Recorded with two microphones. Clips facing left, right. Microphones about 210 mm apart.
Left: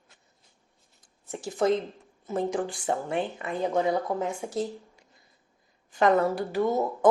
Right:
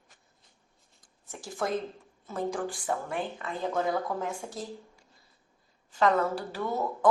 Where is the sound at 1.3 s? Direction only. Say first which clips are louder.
Left 7 dB; 20° left (ahead or behind).